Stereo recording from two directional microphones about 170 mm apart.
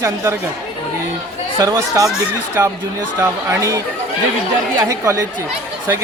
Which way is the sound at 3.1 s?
15° right (ahead or behind).